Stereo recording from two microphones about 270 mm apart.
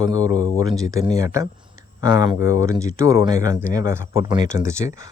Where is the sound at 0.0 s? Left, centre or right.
Centre.